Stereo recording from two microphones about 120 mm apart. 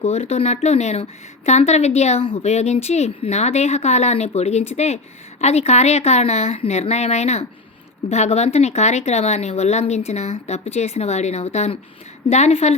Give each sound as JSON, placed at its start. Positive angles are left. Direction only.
{"t": 0.0, "sound": "speech", "side_deg": 65}